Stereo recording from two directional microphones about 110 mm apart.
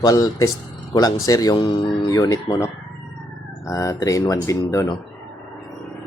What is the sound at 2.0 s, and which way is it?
Speech, 30° left (ahead or behind).